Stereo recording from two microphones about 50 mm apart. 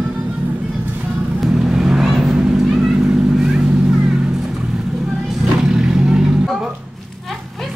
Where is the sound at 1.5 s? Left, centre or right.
Centre.